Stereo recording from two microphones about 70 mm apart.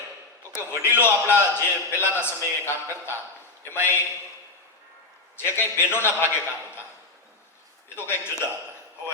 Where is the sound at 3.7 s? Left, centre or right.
Left.